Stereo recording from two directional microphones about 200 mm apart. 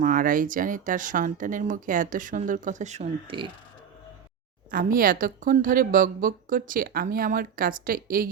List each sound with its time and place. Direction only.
0.0 s speech: 40° right (ahead or behind)
4.7 s a woman's voice: 45° right (ahead or behind)